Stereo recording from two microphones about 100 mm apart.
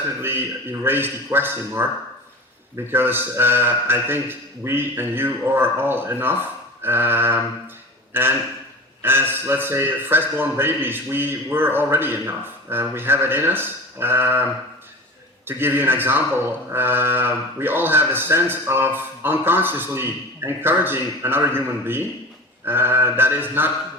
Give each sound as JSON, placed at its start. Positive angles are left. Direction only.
{"t": 0.2, "sound": "a man's voice", "side_deg": -20}
{"t": 15.4, "sound": "a man's voice", "side_deg": -20}